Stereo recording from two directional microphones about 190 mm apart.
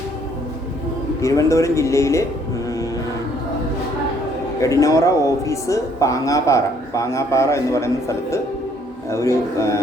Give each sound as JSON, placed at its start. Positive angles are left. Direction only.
{"t": 1.2, "sound": "speech", "side_deg": 15}
{"t": 4.6, "sound": "speech", "side_deg": 15}